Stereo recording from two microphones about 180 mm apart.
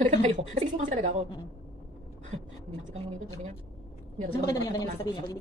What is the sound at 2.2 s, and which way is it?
Speech, 40° right (ahead or behind).